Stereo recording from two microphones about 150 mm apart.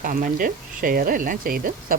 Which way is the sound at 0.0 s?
65° right (ahead or behind).